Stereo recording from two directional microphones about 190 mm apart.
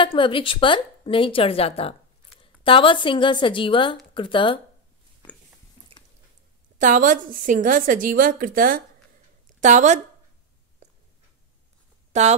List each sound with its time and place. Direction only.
0.0 s a woman's voice: 25° left (ahead or behind)
6.8 s a woman's voice: 45° right (ahead or behind)
10.8 s a sound: 35° right (ahead or behind)
12.1 s speech: 35° right (ahead or behind)